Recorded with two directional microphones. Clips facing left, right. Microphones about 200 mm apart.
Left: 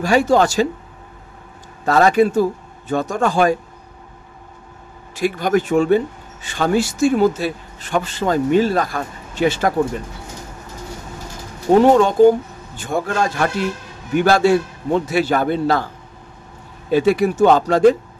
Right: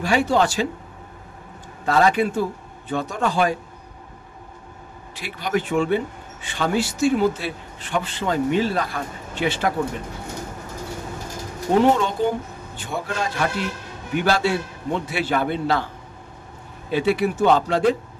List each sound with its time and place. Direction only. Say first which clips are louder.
0.0 s speech: left 5 dB; 45° left (ahead or behind)
1.9 s speech: left 5 dB; 45° left (ahead or behind)
5.1 s speech: left 7 dB; 45° left (ahead or behind)
11.8 s speech: left 9 dB; 45° left (ahead or behind)
16.9 s speech: left 5 dB; 45° left (ahead or behind)